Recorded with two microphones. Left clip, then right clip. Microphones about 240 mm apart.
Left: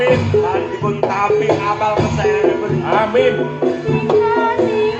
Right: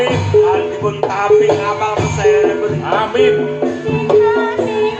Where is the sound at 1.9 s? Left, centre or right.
Right.